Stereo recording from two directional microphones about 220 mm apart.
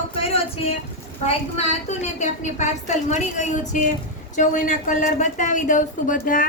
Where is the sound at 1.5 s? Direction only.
30° left (ahead or behind).